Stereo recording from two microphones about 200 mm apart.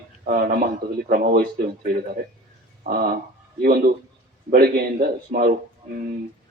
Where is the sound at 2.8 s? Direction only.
50° right (ahead or behind).